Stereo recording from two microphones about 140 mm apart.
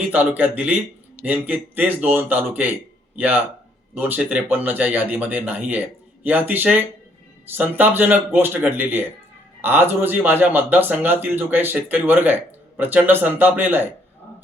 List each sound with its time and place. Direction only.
0.1 s speech: 10° right (ahead or behind)